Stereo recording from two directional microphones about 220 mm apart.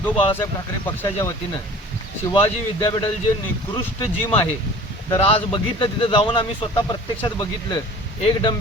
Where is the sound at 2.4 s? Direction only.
20° left (ahead or behind).